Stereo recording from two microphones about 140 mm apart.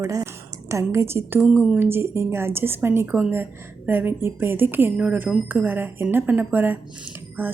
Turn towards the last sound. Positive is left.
turn(degrees=-15)  # may be behind; listen again after turning